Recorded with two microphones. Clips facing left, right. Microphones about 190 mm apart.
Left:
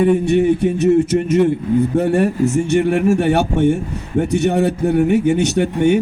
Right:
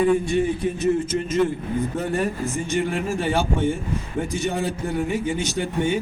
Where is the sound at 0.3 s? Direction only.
70° left (ahead or behind).